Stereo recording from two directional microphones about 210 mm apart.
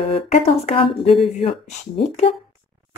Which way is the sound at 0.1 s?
30° left (ahead or behind).